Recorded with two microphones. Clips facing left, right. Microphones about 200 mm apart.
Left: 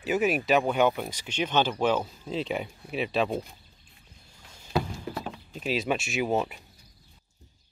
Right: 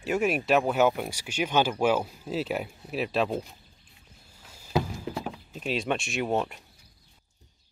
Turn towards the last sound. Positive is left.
turn(degrees=5)  # may be behind; listen again after turning